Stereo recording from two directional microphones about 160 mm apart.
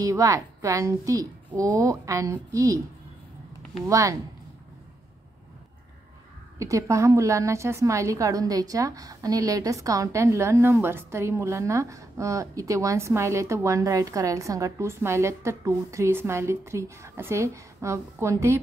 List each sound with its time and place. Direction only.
0.0 s a woman's voice: 20° right (ahead or behind)
3.8 s a woman's voice: 20° right (ahead or behind)
6.6 s a woman's voice: 20° right (ahead or behind)